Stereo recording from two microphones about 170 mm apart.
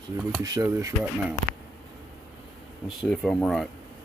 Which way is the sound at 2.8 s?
Centre (ahead or behind).